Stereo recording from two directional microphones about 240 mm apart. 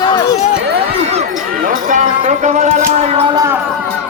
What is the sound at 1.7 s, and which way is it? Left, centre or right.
Music, right.